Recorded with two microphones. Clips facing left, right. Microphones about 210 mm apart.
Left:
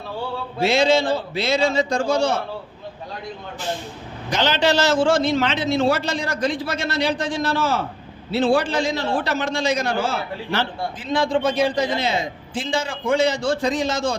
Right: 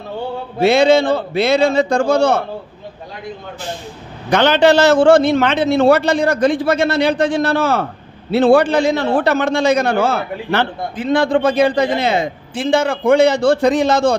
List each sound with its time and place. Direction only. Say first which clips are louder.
0.6 s a man's voice: right 6 dB; 60° right (ahead or behind)
4.3 s a man's voice: right 8 dB; 60° right (ahead or behind)